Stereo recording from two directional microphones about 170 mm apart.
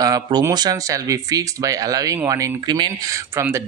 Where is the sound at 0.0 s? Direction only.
20° right (ahead or behind).